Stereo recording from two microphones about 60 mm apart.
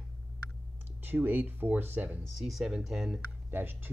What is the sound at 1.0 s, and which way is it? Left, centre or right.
Speech, right.